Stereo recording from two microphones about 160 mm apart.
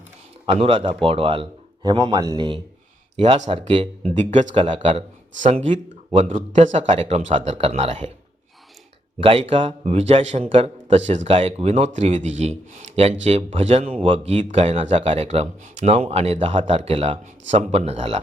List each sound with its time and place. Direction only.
0.4 s speech: 35° right (ahead or behind)
3.2 s a man's voice: 45° right (ahead or behind)
4.5 s speech: 30° right (ahead or behind)
5.4 s a man's voice: 45° right (ahead or behind)
9.2 s speech: 35° right (ahead or behind)